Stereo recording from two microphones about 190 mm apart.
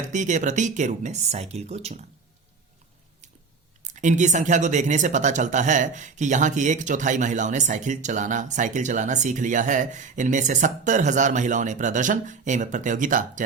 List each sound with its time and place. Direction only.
0.1 s speech: 40° right (ahead or behind)
3.8 s speech: 40° right (ahead or behind)